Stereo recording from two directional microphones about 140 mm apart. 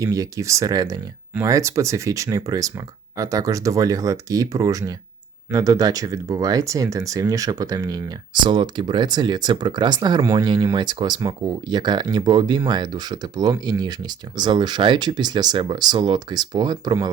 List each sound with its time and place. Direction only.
0.0 s speech: 25° right (ahead or behind)